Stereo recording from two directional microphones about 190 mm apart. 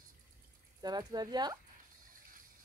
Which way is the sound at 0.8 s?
20° right (ahead or behind).